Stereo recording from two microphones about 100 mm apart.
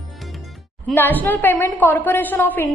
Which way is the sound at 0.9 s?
20° left (ahead or behind).